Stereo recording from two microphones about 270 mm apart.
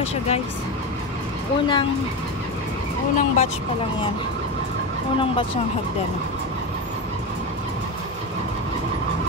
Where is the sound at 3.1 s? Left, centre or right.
Left.